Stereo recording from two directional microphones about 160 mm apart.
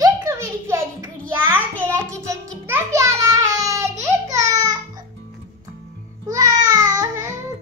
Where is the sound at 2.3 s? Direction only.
15° right (ahead or behind).